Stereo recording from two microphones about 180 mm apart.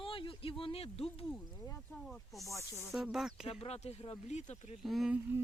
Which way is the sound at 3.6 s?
35° left (ahead or behind).